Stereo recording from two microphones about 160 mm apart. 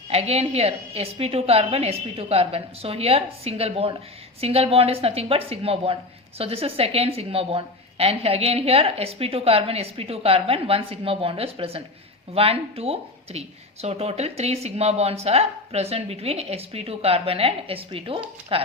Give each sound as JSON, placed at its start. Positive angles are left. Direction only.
{"t": 0.1, "sound": "a woman's voice", "side_deg": -40}